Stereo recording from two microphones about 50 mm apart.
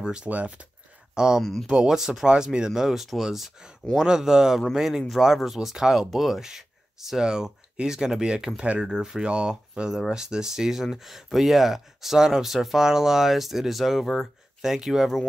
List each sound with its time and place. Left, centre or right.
0.0 s speech: centre
0.3 s speech: right
1.1 s speech: centre
1.4 s speech: centre
1.7 s speech: centre